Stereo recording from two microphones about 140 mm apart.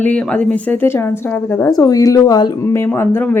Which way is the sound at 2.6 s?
20° left (ahead or behind).